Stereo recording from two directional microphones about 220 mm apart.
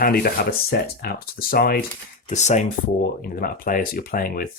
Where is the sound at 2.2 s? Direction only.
30° left (ahead or behind).